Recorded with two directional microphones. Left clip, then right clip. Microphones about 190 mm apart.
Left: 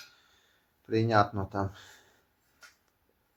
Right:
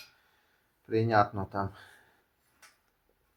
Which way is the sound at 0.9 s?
25° left (ahead or behind).